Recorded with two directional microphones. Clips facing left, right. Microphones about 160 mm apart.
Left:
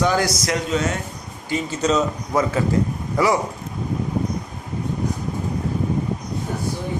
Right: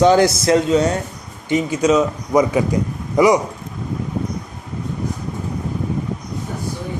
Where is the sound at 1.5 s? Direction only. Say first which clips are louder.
Right 5 dB; 15° right (ahead or behind).